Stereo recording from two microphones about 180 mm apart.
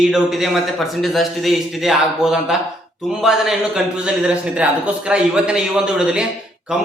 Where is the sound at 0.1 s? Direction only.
Centre (ahead or behind).